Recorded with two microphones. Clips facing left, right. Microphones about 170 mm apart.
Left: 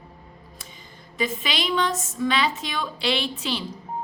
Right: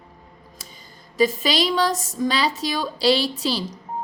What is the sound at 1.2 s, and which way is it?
A woman's voice, 40° right (ahead or behind).